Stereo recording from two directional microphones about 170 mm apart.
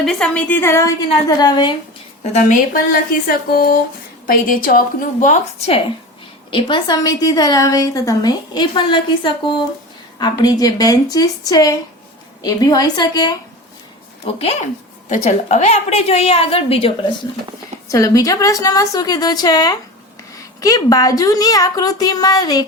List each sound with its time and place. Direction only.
0.0 s a woman's voice: 5° left (ahead or behind); by 1.7 s 25° left (ahead or behind)
2.3 s a woman's voice: 50° left (ahead or behind)
6.5 s a woman's voice: 30° left (ahead or behind)
15.1 s a woman's voice: 45° left (ahead or behind)
17.8 s a woman's voice: 20° left (ahead or behind)